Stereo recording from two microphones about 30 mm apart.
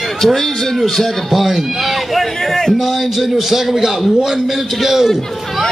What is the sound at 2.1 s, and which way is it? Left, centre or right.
Speech, centre.